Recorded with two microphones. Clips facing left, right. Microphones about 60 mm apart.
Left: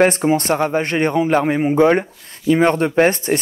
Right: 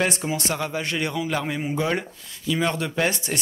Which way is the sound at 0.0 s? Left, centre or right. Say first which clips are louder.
Left 10 dB; left.